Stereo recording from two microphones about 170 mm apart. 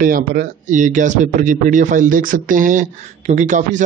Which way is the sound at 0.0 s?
55° right (ahead or behind).